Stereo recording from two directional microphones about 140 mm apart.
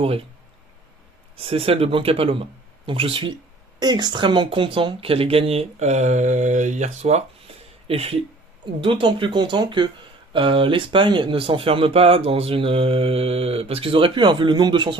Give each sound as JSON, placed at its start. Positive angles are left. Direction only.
{"t": 0.0, "sound": "speech", "side_deg": -40}
{"t": 1.4, "sound": "speech", "side_deg": -40}